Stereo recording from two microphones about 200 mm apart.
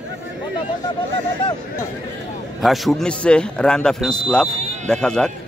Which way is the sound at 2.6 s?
Centre (ahead or behind).